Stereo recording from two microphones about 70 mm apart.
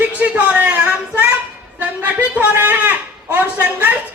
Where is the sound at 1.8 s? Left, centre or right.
Right.